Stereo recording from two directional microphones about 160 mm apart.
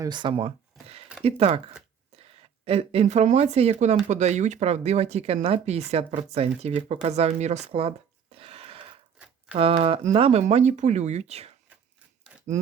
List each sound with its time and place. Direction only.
0.0 s speech: 30° right (ahead or behind)
2.6 s speech: 40° right (ahead or behind)